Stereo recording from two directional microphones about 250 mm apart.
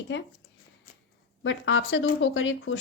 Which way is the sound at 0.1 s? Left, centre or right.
Left.